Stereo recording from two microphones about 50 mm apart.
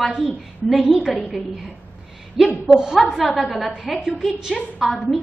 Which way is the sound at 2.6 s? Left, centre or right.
Centre.